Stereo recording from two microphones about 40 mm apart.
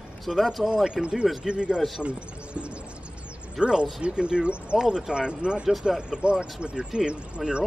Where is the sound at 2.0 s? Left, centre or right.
Right.